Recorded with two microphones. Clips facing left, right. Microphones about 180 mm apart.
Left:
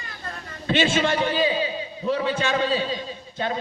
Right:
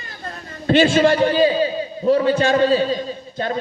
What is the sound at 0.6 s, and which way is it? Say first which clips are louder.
A man's voice: right 7 dB; 40° right (ahead or behind).